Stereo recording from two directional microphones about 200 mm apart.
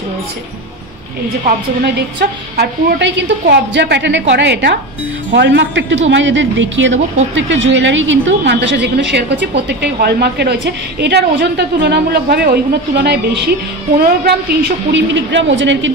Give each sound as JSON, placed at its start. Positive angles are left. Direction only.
{"t": 2.0, "sound": "a woman's voice", "side_deg": -55}